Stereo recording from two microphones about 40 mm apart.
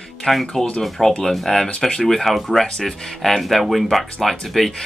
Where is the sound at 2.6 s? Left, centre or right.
Centre.